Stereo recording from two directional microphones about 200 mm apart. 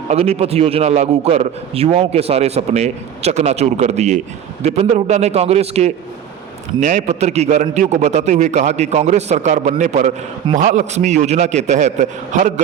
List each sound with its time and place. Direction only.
0.1 s a man's voice: 30° right (ahead or behind)